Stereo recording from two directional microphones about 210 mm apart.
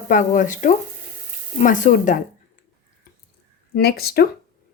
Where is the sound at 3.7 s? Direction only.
50° left (ahead or behind).